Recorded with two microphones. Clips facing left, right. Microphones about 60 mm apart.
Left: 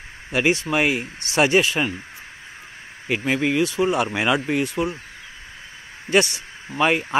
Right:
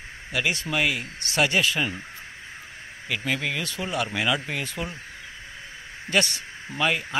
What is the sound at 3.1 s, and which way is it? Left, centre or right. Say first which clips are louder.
Speech: left 6 dB; centre.